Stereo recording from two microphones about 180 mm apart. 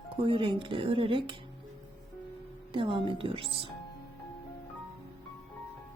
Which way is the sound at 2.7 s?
30° right (ahead or behind).